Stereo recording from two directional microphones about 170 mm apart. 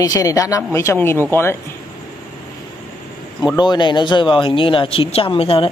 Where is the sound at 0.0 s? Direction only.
20° left (ahead or behind).